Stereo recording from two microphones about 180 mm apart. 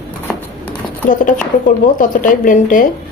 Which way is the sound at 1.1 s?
45° left (ahead or behind).